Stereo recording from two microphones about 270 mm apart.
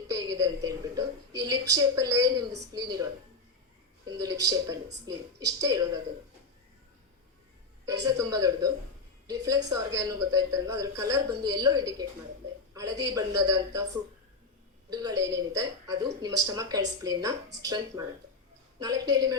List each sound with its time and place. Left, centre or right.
0.1 s a sound: centre
1.7 s a woman's voice: centre
8.0 s a woman's voice: centre
14.8 s a woman's voice: centre